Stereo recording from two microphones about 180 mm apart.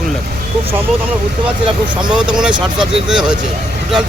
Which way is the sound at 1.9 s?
5° right (ahead or behind).